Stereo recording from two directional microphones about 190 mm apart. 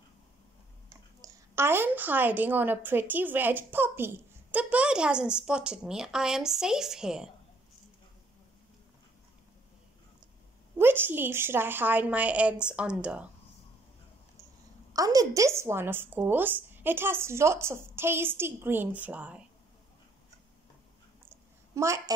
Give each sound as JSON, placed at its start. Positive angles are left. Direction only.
{"t": 0.8, "sound": "a woman's voice", "side_deg": -15}
{"t": 10.8, "sound": "a woman's voice", "side_deg": -10}
{"t": 14.9, "sound": "a woman's voice", "side_deg": -20}
{"t": 21.3, "sound": "a sound", "side_deg": -15}